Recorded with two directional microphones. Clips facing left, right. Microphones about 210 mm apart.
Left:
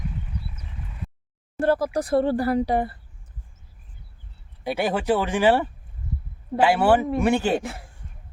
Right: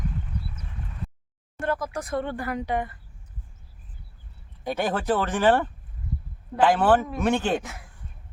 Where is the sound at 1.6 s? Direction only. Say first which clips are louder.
Left 7 dB; 35° left (ahead or behind).